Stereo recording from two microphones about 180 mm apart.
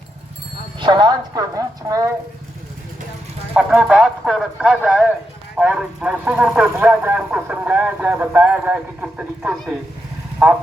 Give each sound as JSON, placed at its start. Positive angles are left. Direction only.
{"t": 0.8, "sound": "speech", "side_deg": -25}
{"t": 3.5, "sound": "speech", "side_deg": -5}